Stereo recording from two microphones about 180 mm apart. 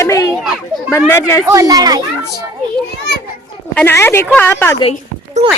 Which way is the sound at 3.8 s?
10° left (ahead or behind).